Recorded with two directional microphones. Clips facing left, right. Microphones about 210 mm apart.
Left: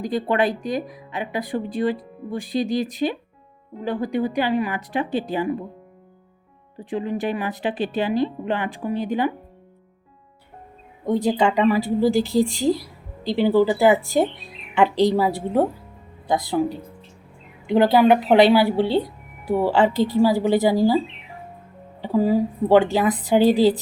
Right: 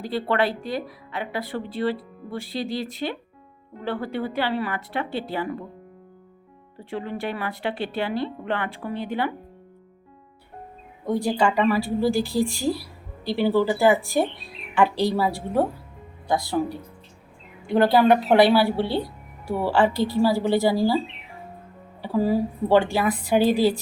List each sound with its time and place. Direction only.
0.0 s speech: 15° left (ahead or behind)
6.7 s speech: 15° left (ahead or behind)
11.0 s a woman's voice: 20° left (ahead or behind)
22.0 s speech: 15° left (ahead or behind)